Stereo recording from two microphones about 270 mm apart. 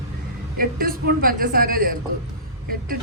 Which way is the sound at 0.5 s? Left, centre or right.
Right.